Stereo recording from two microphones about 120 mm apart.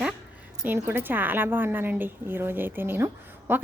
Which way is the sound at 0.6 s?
15° right (ahead or behind).